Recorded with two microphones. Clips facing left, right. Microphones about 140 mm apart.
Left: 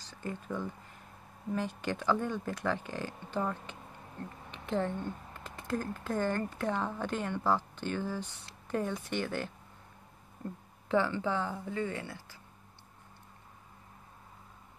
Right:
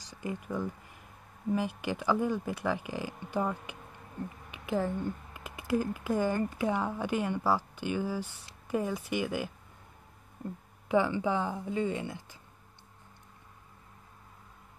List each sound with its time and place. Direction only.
0.0 s speech: 10° right (ahead or behind)
10.9 s speech: 15° right (ahead or behind)